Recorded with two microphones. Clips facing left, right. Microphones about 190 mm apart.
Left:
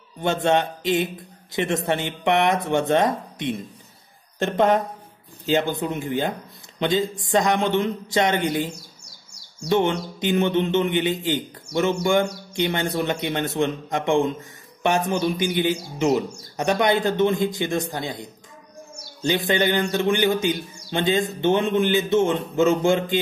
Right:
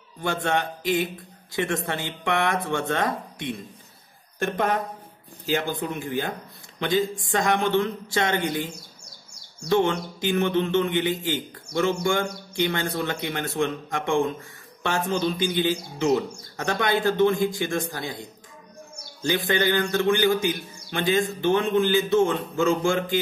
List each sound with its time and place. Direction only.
0.2 s a man's voice: 20° left (ahead or behind)
9.7 s a man's voice: 20° left (ahead or behind)